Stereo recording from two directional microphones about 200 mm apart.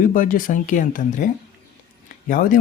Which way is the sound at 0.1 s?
40° left (ahead or behind).